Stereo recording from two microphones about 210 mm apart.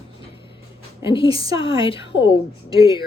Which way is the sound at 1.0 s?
25° left (ahead or behind).